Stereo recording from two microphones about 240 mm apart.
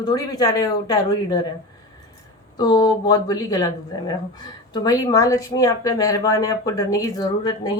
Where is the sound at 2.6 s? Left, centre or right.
Centre.